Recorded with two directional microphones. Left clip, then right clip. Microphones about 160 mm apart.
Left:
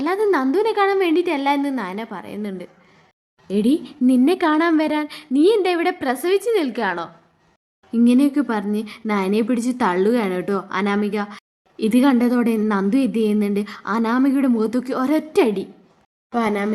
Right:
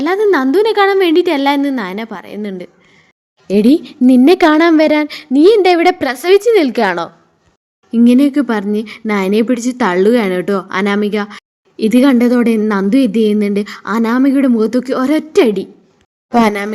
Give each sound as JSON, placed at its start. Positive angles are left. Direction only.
{"t": 0.0, "sound": "speech", "side_deg": -25}
{"t": 3.4, "sound": "speech", "side_deg": -45}
{"t": 7.9, "sound": "speech", "side_deg": -25}
{"t": 16.3, "sound": "speech", "side_deg": -55}